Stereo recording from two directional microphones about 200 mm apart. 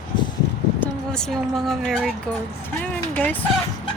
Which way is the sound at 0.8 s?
5° left (ahead or behind).